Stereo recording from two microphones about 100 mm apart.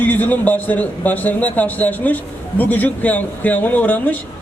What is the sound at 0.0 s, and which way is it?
A man's voice, 15° left (ahead or behind).